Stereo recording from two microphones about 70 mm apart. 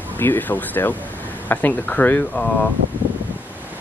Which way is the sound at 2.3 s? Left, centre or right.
Centre.